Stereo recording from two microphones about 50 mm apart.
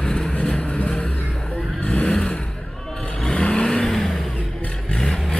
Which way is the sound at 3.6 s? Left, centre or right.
Centre.